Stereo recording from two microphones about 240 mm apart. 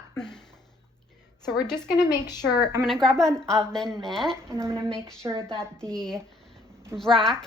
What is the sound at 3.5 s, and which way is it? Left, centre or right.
Speech, centre.